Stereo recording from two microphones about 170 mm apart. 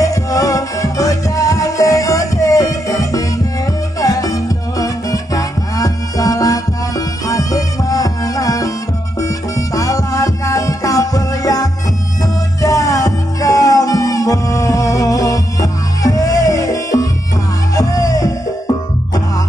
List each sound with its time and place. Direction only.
0.0 s music: 20° left (ahead or behind)
9.8 s music: 20° left (ahead or behind)